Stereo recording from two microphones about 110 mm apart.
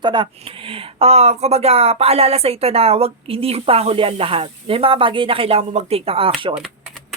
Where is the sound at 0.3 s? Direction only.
55° right (ahead or behind).